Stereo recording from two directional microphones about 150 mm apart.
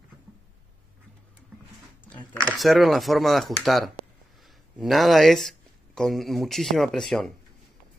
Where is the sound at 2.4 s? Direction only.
5° left (ahead or behind).